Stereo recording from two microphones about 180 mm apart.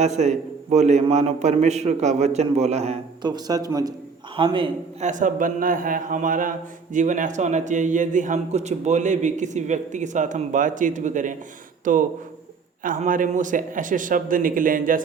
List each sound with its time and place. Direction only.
0.0 s a man's voice: 40° right (ahead or behind)
3.2 s a man's voice: 20° right (ahead or behind)
5.0 s a man's voice: 45° right (ahead or behind)